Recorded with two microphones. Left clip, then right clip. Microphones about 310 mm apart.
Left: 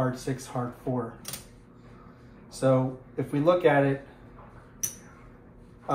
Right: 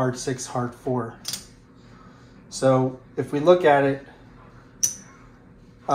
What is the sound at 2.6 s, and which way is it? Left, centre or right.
Speech, right.